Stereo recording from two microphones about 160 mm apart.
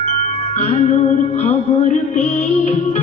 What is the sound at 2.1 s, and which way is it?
Music, 40° left (ahead or behind).